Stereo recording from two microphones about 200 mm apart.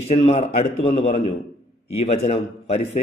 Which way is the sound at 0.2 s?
30° left (ahead or behind).